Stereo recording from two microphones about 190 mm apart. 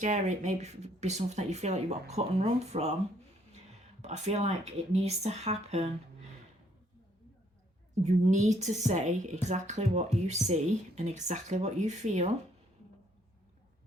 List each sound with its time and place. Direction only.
0.0 s a woman's voice: 40° right (ahead or behind)
8.0 s a woman's voice: 40° right (ahead or behind)